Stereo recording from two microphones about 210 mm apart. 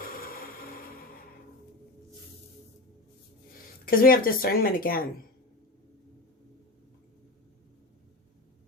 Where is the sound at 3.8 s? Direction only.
45° left (ahead or behind).